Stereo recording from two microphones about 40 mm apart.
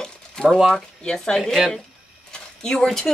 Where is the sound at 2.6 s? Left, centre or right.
Centre.